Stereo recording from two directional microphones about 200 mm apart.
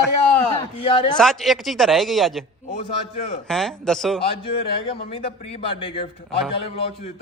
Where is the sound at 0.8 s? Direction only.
25° left (ahead or behind).